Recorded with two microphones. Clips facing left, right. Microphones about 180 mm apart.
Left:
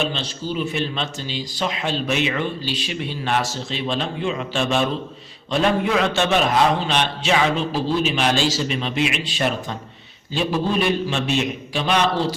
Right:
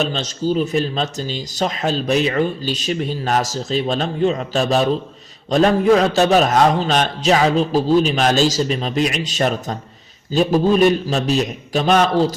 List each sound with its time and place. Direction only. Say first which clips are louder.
0.0 s a man's voice: right 5 dB; 40° right (ahead or behind)